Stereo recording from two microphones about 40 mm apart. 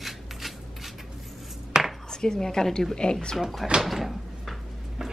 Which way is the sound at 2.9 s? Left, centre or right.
Left.